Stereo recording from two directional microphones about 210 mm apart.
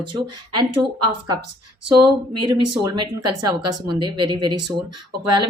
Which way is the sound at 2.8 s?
20° right (ahead or behind).